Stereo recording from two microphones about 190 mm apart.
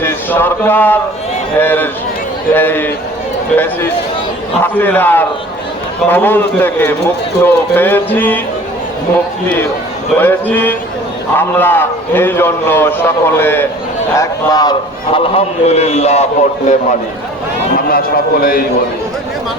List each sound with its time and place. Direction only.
0.0 s a man's voice: 10° left (ahead or behind)
4.6 s a man's voice: 10° left (ahead or behind)
10.2 s a man's voice: 10° left (ahead or behind); by 16.8 s 40° left (ahead or behind)
17.8 s a man's voice: 50° left (ahead or behind)